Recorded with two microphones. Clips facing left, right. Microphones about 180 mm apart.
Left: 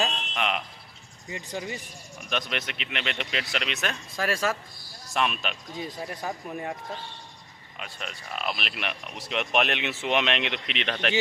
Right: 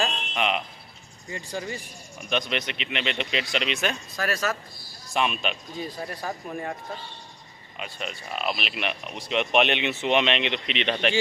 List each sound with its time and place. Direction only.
0.3 s speech: centre (ahead or behind)
1.3 s speech: 15° left (ahead or behind)
2.3 s speech: centre (ahead or behind)
4.2 s speech: 25° left (ahead or behind)
5.1 s speech: centre (ahead or behind)
5.8 s speech: 10° left (ahead or behind)
7.8 s speech: centre (ahead or behind)